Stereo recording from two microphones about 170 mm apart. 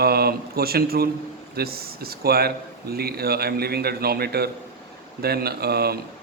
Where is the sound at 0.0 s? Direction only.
65° right (ahead or behind).